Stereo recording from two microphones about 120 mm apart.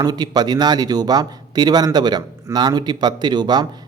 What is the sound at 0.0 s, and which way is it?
Speech, 35° right (ahead or behind).